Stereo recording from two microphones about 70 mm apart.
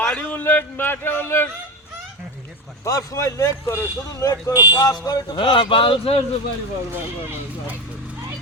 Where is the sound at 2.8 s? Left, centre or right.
Left.